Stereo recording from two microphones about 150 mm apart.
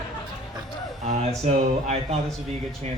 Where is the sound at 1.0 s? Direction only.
45° right (ahead or behind).